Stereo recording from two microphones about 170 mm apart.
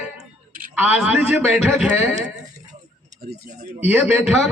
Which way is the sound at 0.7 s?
10° right (ahead or behind).